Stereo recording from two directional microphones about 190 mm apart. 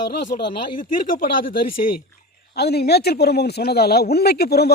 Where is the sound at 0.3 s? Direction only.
50° left (ahead or behind).